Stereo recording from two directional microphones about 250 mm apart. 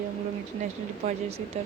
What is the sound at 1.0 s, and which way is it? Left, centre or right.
Speech, right.